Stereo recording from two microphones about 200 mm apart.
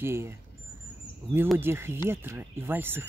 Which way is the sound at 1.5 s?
10° right (ahead or behind).